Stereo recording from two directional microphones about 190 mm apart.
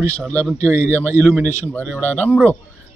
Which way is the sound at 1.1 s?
15° right (ahead or behind).